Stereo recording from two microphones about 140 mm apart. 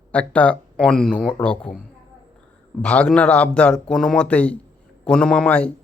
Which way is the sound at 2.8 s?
10° left (ahead or behind).